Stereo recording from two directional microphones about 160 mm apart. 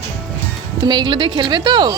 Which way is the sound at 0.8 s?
25° right (ahead or behind).